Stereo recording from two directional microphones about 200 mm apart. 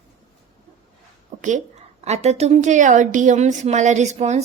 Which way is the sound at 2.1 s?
35° right (ahead or behind).